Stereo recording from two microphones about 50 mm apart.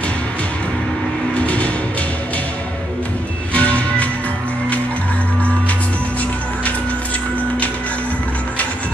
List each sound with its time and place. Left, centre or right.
1.3 s music: left
3.5 s music: left